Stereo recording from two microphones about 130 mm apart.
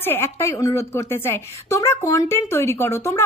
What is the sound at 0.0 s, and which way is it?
A woman's voice, 20° left (ahead or behind).